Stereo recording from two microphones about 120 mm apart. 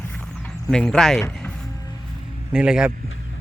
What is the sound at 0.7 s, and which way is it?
Speech, 5° left (ahead or behind).